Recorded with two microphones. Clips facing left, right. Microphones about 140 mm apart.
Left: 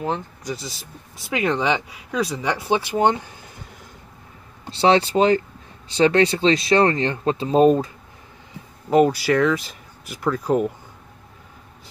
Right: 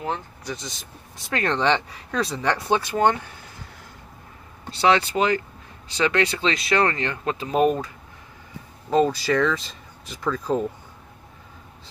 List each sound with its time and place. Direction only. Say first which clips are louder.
0.0 s speech: left 3 dB; 15° left (ahead or behind)
3.0 s speech: left 1 dB; 25° left (ahead or behind)
4.6 s speech: left 3 dB; 30° left (ahead or behind)
8.9 s speech: left 3 dB; 10° left (ahead or behind)